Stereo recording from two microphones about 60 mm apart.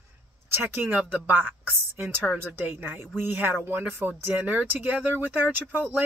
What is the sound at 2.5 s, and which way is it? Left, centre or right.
Speech, right.